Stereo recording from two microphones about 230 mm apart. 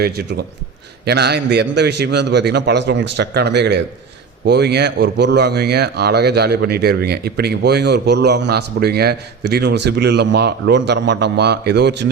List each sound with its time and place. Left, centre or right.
0.0 s speech: right